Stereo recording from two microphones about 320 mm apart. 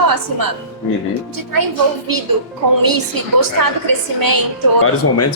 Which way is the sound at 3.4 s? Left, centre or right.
Right.